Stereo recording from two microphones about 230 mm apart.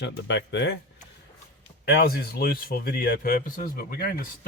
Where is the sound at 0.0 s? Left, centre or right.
Left.